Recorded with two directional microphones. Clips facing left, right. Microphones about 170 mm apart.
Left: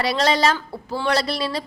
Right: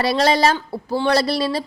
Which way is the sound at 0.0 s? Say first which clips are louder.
Right 3 dB; 35° right (ahead or behind).